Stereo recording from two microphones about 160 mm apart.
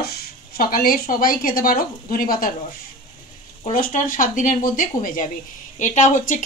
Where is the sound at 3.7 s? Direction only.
60° left (ahead or behind).